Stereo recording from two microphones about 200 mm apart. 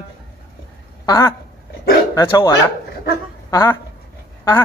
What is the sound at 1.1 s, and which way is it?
Speech, 15° left (ahead or behind).